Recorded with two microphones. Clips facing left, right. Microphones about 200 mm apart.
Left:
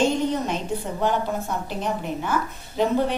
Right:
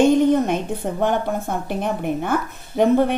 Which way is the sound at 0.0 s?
55° right (ahead or behind).